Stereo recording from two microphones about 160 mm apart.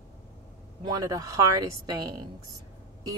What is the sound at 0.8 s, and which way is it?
Speech, 25° right (ahead or behind).